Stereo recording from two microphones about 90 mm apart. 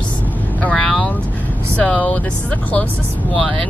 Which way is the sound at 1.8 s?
15° left (ahead or behind).